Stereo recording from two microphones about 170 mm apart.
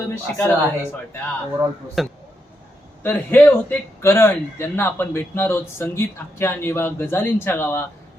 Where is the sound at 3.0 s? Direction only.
10° left (ahead or behind).